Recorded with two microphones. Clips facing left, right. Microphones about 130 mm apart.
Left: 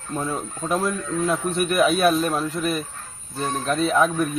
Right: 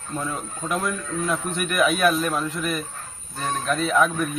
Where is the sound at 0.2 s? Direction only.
30° left (ahead or behind).